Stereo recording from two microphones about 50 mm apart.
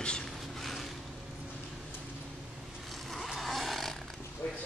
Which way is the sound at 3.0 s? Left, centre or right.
Centre.